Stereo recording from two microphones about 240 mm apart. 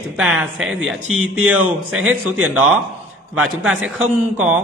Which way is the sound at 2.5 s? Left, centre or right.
Centre.